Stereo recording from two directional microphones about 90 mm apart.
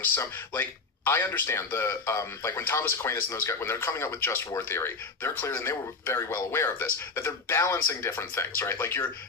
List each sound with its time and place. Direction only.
0.2 s a man's voice: 25° left (ahead or behind)